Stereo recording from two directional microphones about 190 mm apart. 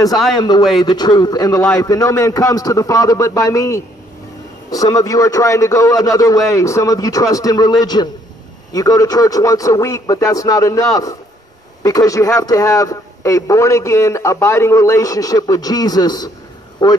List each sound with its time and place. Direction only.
0.1 s a man's voice: centre (ahead or behind)
0.4 s a man's voice: 20° left (ahead or behind)